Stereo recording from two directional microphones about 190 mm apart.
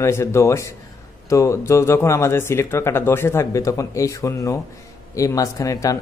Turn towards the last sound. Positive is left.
turn(degrees=15)  # may be behind; listen again after turning